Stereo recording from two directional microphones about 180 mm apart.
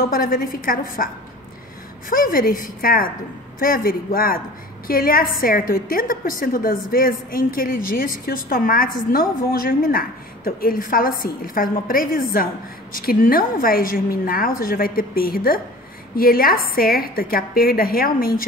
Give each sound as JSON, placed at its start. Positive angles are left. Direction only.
{"t": 0.0, "sound": "a woman's voice", "side_deg": 55}